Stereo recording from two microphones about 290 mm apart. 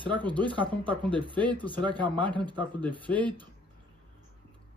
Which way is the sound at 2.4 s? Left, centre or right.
Centre.